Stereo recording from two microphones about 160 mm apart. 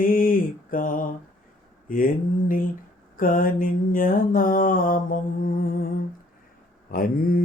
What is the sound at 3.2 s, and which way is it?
Mantra, 60° left (ahead or behind).